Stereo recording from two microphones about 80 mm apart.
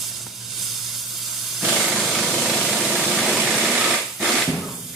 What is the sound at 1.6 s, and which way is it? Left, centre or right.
Engine, centre.